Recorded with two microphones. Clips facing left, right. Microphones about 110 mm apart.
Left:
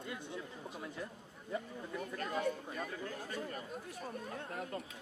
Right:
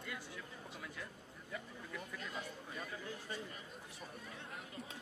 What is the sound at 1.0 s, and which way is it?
Speech, 25° left (ahead or behind).